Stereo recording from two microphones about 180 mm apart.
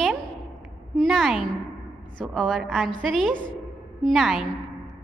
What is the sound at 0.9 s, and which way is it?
A woman's voice, centre (ahead or behind).